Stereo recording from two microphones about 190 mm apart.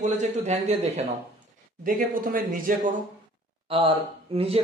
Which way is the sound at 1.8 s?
45° right (ahead or behind).